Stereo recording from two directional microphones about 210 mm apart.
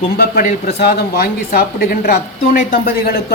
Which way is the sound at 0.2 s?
45° left (ahead or behind).